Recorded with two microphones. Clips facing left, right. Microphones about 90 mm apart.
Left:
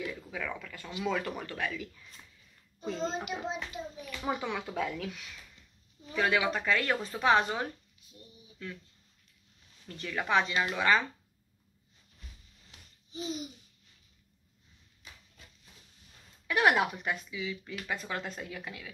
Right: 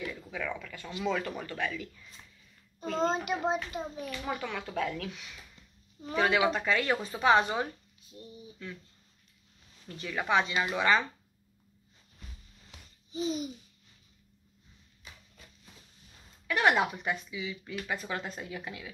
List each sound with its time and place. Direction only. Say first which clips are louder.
0.0 s speech: right 1 dB; 5° left (ahead or behind)
2.9 s a child's voice: right 5 dB; 50° right (ahead or behind)
4.2 s speech: left 4 dB; 15° left (ahead or behind); by 7.6 s centre (ahead or behind)
8.2 s speech: right 7 dB; 35° right (ahead or behind)
9.8 s speech: right 1 dB; 5° right (ahead or behind)
16.4 s speech: even; 10° left (ahead or behind); by 18.9 s 10° right (ahead or behind)